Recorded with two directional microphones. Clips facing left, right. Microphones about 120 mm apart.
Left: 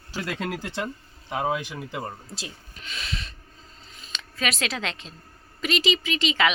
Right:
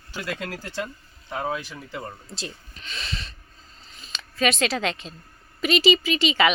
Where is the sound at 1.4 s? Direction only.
20° left (ahead or behind).